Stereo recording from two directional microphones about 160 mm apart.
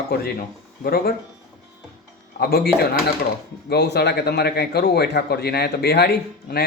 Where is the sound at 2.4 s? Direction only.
80° left.